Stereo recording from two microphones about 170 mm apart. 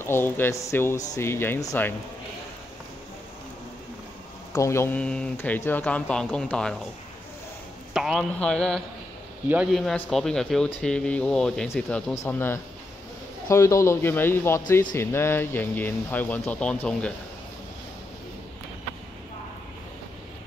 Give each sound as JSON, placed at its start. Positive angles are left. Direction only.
{"t": 0.0, "sound": "speech", "side_deg": 15}
{"t": 4.6, "sound": "speech", "side_deg": 15}
{"t": 7.9, "sound": "speech", "side_deg": -5}
{"t": 12.3, "sound": "speech", "side_deg": 15}